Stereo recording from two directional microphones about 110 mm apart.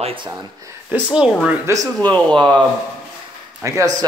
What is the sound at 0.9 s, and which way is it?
Speech, 10° right (ahead or behind).